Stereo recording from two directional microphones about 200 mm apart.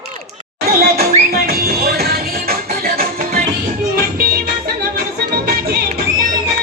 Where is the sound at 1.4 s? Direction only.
50° right (ahead or behind).